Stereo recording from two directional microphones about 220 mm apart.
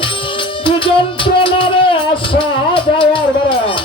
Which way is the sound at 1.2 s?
25° left (ahead or behind).